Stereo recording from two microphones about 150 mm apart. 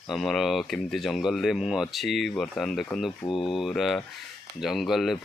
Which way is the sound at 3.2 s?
35° left (ahead or behind).